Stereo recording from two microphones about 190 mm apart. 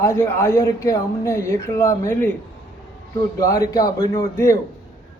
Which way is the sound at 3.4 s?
15° left (ahead or behind).